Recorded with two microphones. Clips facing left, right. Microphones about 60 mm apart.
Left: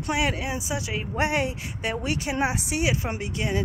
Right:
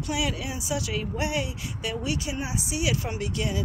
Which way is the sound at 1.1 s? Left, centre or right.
Left.